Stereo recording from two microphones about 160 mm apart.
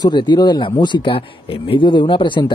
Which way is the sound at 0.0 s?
30° left (ahead or behind).